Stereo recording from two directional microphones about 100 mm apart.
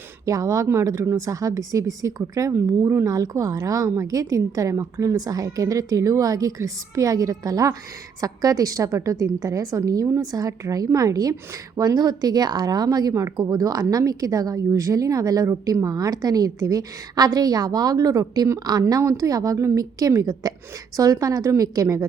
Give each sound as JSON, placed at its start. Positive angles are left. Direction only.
{"t": 0.3, "sound": "a woman's voice", "side_deg": -35}